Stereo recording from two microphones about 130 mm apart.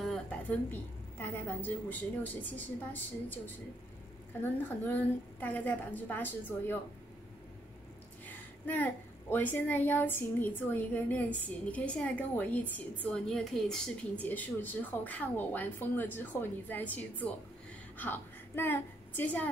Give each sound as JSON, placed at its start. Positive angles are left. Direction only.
{"t": 0.0, "sound": "a woman's voice", "side_deg": 5}
{"t": 8.3, "sound": "a woman's voice", "side_deg": 15}